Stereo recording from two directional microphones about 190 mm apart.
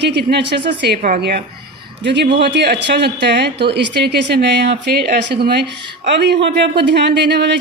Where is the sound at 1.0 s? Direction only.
50° right (ahead or behind).